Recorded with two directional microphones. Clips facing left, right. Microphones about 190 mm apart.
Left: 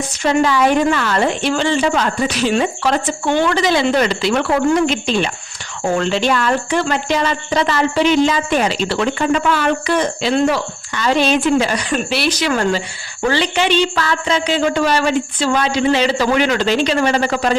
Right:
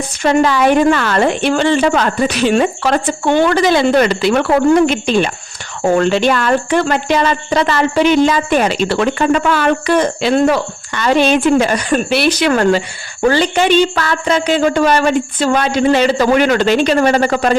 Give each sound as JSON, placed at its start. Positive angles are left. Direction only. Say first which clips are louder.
{"t": 0.2, "sound": "speech", "louder": "right 2 dB", "side_deg": -60}
{"t": 13.2, "sound": "a woman's voice", "louder": "right 4 dB", "side_deg": -45}